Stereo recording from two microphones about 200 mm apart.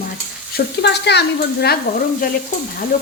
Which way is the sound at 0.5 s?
55° left (ahead or behind).